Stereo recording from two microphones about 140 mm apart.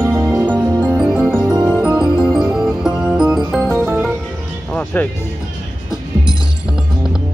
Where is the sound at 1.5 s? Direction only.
30° right (ahead or behind).